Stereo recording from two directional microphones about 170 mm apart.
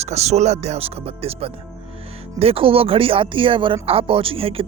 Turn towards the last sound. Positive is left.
turn(degrees=-35)  # may be behind; listen again after turning